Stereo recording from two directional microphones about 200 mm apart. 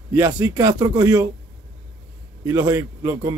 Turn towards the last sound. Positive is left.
turn(degrees=-15)  # may be behind; listen again after turning